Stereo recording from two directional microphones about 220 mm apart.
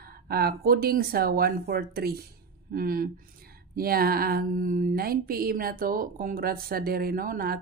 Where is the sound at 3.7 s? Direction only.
45° right (ahead or behind).